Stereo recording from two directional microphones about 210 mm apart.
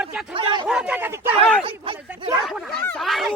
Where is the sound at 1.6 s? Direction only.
25° right (ahead or behind).